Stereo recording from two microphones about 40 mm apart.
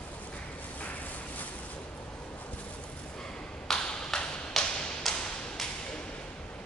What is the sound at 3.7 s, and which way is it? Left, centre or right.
Tap, left.